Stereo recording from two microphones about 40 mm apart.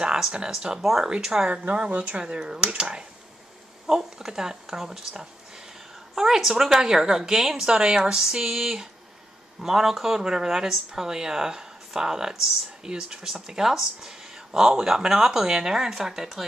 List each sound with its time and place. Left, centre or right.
0.5 s speech: centre
1.5 s speech: right
3.8 s speech: centre